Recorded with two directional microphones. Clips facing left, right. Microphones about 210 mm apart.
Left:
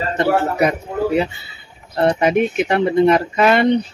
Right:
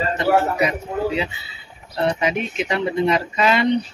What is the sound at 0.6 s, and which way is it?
A man's voice, 55° left (ahead or behind).